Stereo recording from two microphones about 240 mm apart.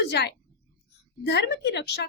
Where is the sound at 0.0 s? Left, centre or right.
Left.